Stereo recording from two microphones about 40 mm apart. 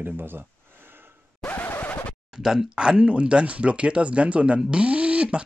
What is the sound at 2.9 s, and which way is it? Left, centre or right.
Speech, right.